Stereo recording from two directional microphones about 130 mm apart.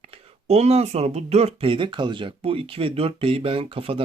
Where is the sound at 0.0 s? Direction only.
50° right (ahead or behind).